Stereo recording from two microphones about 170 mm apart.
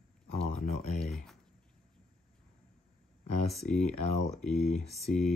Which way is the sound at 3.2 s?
40° left (ahead or behind).